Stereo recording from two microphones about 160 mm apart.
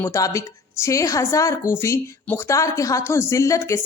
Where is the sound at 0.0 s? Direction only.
20° left (ahead or behind).